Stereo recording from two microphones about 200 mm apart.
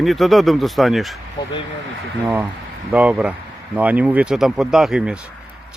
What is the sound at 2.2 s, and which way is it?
Speech, 10° right (ahead or behind).